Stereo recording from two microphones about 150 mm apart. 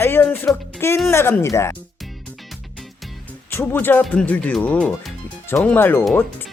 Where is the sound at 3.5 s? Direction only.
15° left (ahead or behind).